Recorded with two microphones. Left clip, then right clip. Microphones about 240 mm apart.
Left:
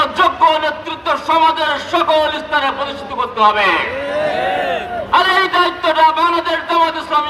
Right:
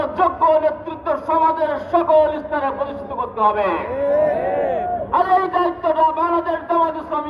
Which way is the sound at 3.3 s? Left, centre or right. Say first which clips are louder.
Left 5 dB; left.